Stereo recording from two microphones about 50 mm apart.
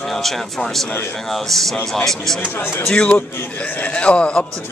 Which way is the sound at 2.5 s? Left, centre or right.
Left.